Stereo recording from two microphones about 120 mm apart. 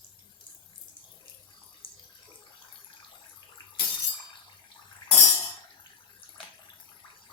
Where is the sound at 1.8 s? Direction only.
45° left (ahead or behind).